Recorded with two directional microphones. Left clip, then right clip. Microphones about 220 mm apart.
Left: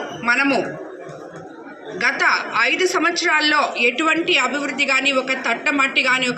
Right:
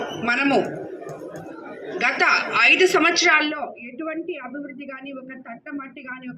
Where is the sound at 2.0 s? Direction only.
45° left (ahead or behind).